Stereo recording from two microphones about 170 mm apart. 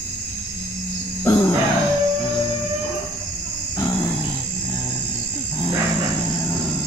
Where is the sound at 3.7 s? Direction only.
20° left (ahead or behind).